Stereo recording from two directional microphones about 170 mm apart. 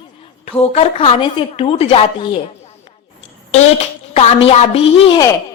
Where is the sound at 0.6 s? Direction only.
35° left (ahead or behind).